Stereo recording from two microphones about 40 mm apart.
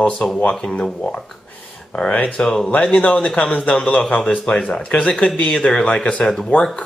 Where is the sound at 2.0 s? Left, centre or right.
Left.